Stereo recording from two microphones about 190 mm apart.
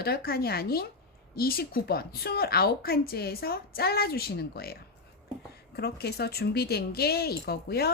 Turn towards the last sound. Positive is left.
turn(degrees=55)  # may be behind; listen again after turning